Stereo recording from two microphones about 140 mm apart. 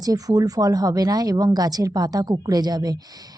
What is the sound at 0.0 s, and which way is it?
A woman's voice, 25° right (ahead or behind).